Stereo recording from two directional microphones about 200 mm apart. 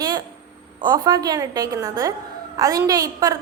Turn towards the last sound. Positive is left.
turn(degrees=-15)  # may be behind; listen again after turning